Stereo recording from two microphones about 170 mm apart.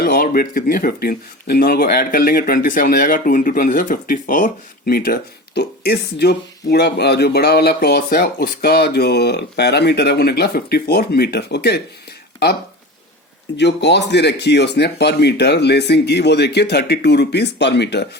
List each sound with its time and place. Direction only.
0.0 s speech: 60° left (ahead or behind)
13.6 s speech: 90° left